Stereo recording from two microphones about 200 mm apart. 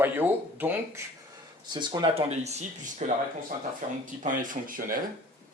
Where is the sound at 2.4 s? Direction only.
35° right (ahead or behind).